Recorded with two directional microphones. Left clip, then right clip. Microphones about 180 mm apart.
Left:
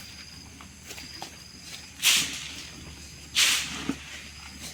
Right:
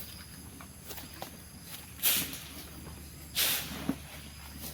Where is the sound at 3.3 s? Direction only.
40° right (ahead or behind).